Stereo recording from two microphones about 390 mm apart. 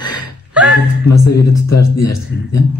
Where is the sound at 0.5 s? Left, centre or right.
Centre.